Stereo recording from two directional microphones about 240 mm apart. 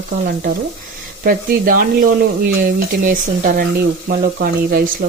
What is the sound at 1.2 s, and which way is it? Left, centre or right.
Speech, right.